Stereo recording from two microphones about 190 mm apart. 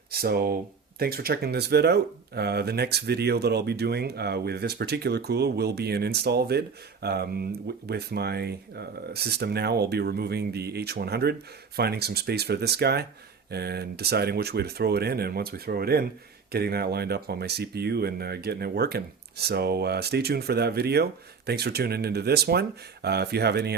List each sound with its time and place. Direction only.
0.1 s speech: 55° right (ahead or behind)